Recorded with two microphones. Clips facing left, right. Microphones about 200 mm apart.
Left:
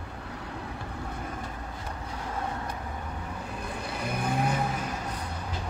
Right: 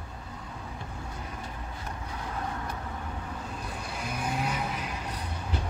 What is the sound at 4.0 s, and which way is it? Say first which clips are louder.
Vehicle: left 3 dB; 55° left (ahead or behind).